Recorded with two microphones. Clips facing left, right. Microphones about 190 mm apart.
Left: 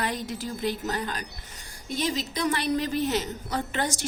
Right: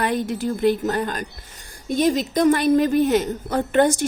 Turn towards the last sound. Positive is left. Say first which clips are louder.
# right 11 dB
turn(degrees=-55)  # may be behind; listen again after turning